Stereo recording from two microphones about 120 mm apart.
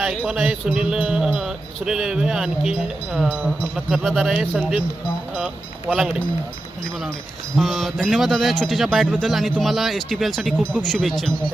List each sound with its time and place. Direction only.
0.3 s speech: 5° right (ahead or behind)
7.5 s speech: centre (ahead or behind)